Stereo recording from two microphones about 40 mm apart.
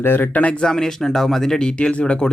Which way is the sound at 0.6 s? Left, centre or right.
Centre.